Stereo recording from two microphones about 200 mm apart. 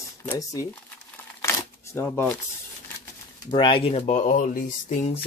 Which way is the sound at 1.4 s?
15° left (ahead or behind).